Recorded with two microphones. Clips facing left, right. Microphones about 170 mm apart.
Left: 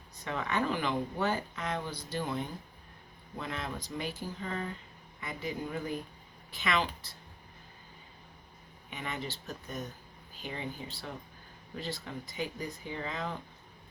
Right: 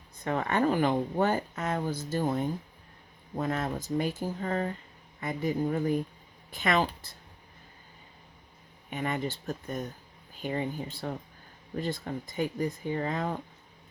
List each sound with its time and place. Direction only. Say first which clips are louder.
0.3 s speech: right 6 dB; 50° right (ahead or behind)
8.9 s speech: right 7 dB; 50° right (ahead or behind)